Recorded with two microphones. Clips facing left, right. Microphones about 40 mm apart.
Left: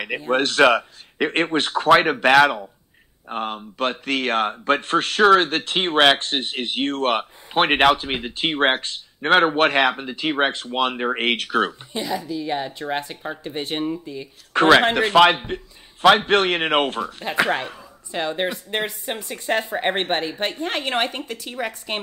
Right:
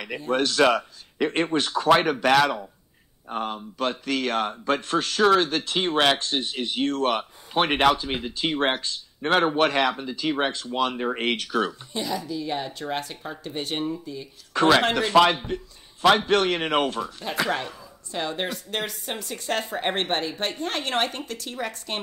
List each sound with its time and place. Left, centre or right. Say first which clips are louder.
0.3 s speech: left 4 dB; left
11.9 s speech: left 3 dB; centre
14.5 s a man's voice: left 4 dB; left; by 22.0 s centre